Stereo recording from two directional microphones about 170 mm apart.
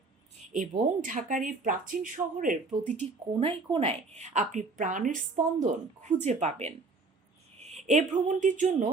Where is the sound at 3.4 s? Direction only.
35° right (ahead or behind).